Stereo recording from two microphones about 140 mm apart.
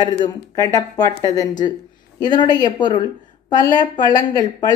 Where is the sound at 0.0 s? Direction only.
30° left (ahead or behind).